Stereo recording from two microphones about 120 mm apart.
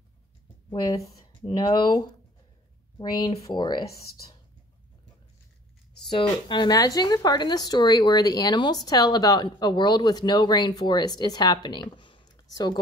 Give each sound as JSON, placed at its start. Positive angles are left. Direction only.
{"t": 0.7, "sound": "speech", "side_deg": 30}
{"t": 3.0, "sound": "speech", "side_deg": 35}
{"t": 6.0, "sound": "speech", "side_deg": 40}